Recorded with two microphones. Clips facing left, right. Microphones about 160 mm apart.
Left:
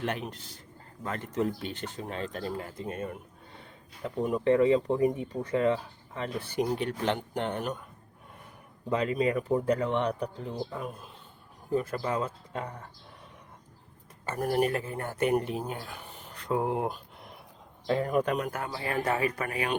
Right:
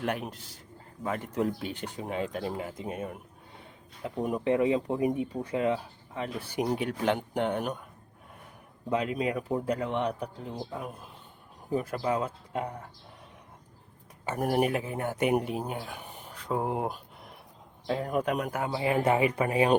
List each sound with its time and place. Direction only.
0.0 s speech: 5° right (ahead or behind)
8.9 s speech: 5° right (ahead or behind)
11.7 s speech: 15° right (ahead or behind)
14.3 s speech: 15° right (ahead or behind)
16.7 s a sound: 5° right (ahead or behind)
17.8 s speech: 5° right (ahead or behind); by 19.7 s 25° right (ahead or behind)